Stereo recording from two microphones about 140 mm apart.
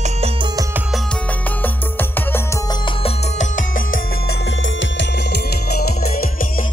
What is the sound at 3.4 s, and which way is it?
Music, 70° left (ahead or behind).